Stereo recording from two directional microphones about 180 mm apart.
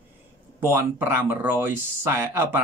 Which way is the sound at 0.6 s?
15° right (ahead or behind).